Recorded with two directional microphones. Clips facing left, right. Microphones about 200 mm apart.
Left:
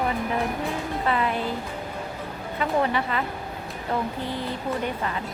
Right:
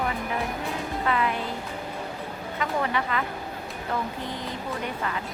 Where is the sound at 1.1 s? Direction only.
30° left (ahead or behind).